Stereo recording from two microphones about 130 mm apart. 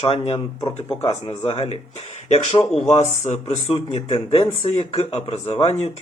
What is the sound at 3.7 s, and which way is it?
Speech, 45° left (ahead or behind).